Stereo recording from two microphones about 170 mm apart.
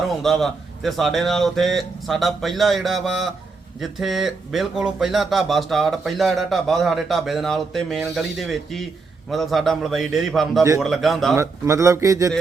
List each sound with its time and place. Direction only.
0.2 s speech: centre (ahead or behind)
11.3 s a man's voice: 15° right (ahead or behind)